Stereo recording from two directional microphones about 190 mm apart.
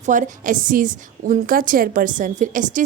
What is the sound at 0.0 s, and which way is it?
A woman's voice, 40° right (ahead or behind).